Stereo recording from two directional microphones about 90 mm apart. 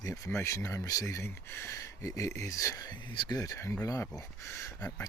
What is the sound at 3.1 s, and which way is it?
Speech, 60° left (ahead or behind).